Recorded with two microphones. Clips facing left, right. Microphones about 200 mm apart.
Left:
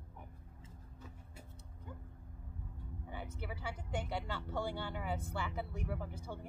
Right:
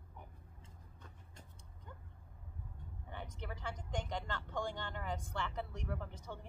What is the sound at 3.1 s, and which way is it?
Speech, 5° left (ahead or behind).